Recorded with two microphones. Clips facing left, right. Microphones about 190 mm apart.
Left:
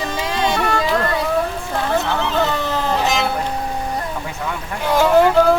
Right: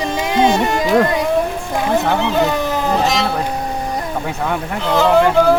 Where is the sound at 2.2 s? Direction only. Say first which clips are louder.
Right 3 dB; 15° right (ahead or behind).